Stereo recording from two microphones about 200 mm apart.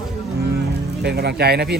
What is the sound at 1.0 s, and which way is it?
Speech, 55° right (ahead or behind).